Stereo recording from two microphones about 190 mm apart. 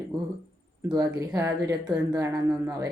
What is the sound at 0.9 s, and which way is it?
Speech, 20° right (ahead or behind).